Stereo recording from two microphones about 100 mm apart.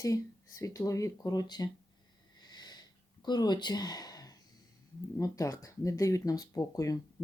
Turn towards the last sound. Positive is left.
turn(degrees=40)  # may be behind; listen again after turning